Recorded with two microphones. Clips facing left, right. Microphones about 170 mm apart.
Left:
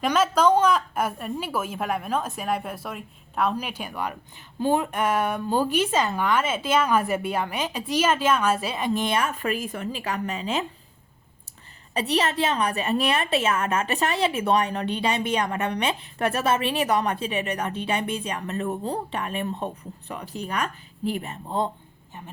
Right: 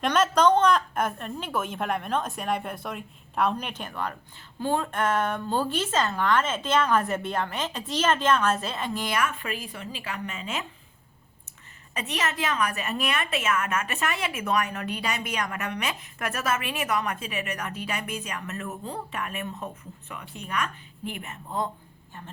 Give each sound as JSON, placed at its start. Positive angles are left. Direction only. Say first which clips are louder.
{"t": 0.0, "sound": "a woman's voice", "louder": "left 1 dB", "side_deg": 5}
{"t": 9.4, "sound": "a woman's voice", "louder": "left 7 dB", "side_deg": 45}
{"t": 11.9, "sound": "a woman's voice", "louder": "left 6 dB", "side_deg": 35}